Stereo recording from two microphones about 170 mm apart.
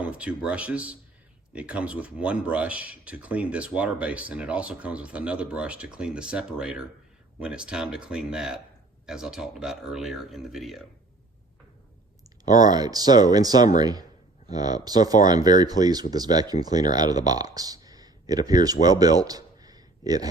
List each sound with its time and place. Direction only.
0.0 s speech: 5° right (ahead or behind)
12.5 s speech: 20° right (ahead or behind)